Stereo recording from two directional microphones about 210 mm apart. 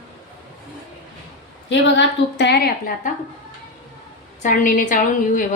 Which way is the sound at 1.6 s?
55° left (ahead or behind).